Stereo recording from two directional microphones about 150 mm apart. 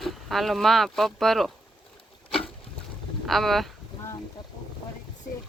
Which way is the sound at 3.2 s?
Centre (ahead or behind).